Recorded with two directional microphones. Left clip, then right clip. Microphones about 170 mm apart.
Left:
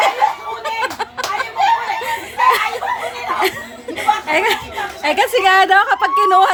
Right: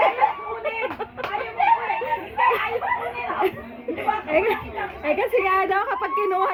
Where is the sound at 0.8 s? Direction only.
25° left (ahead or behind).